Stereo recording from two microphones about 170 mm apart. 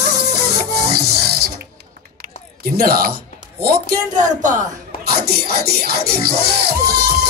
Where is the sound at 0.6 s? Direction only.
70° right (ahead or behind).